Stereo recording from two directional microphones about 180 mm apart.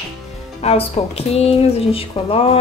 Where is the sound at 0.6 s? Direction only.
35° left (ahead or behind).